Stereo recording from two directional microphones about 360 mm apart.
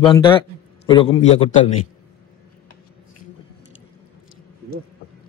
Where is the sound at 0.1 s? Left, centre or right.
Centre.